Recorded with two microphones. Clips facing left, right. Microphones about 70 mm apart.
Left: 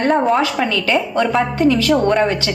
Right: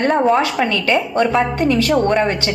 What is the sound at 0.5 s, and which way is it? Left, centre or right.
A woman's voice, right.